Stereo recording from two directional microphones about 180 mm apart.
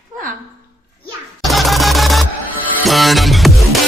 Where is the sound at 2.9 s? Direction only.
Centre (ahead or behind).